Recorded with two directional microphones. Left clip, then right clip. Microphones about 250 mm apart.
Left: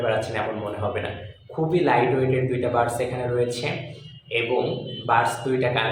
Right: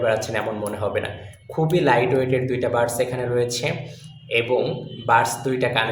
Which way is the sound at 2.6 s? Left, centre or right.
Right.